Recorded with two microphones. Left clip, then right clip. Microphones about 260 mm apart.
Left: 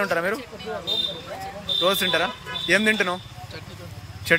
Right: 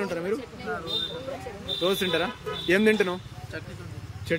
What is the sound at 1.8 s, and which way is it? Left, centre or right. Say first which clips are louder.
Speech: left 3 dB; centre.